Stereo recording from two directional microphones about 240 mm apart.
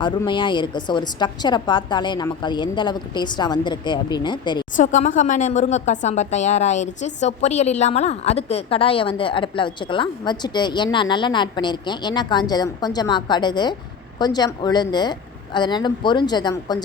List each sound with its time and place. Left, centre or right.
0.0 s a woman's voice: centre
4.8 s a woman's voice: left; by 16.8 s centre